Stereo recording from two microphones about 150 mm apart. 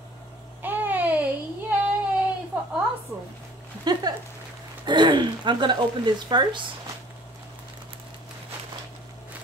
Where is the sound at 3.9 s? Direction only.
25° right (ahead or behind).